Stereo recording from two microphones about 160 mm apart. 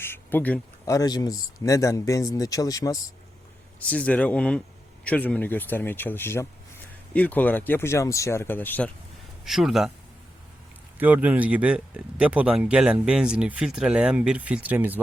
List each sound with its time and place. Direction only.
0.0 s a sound: 15° left (ahead or behind)
0.9 s speech: 25° left (ahead or behind)
3.8 s speech: 10° left (ahead or behind)
9.4 s speech: centre (ahead or behind)
10.9 s speech: 10° right (ahead or behind)